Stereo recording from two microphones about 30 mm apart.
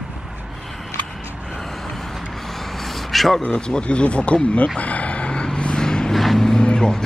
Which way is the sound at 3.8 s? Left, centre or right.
Left.